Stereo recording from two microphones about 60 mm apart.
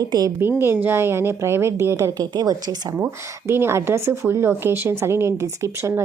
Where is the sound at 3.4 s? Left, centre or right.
Right.